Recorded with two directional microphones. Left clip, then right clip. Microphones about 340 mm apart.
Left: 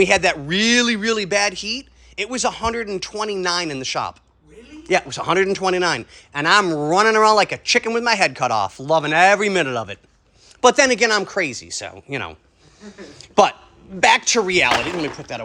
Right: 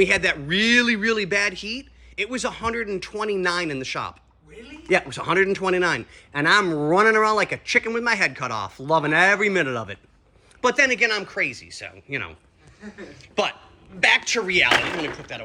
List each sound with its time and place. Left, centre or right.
0.0 s speech: centre